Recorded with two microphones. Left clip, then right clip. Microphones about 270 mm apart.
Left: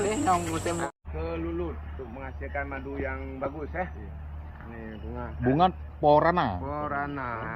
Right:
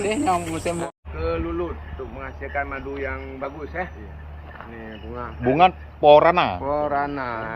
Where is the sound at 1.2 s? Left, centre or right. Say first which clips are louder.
Right 7 dB; centre.